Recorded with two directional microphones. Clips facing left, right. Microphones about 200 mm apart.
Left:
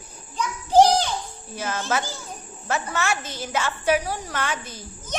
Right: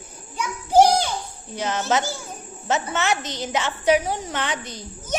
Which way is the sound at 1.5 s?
20° right (ahead or behind).